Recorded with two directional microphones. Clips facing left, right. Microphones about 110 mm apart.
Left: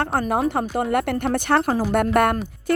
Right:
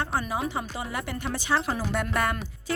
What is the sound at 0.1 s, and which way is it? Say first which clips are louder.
Speech: left 8 dB; 55° left (ahead or behind).